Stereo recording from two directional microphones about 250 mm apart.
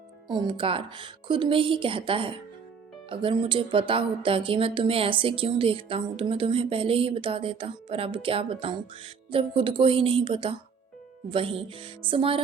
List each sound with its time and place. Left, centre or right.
0.3 s speech: centre